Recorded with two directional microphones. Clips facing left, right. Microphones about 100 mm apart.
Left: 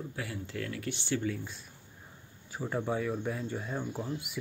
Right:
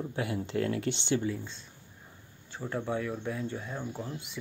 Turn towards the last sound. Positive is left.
turn(degrees=5)  # may be behind; listen again after turning